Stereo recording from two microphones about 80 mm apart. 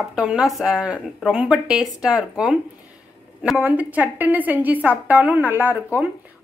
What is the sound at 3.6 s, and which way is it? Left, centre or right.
A woman's voice, right.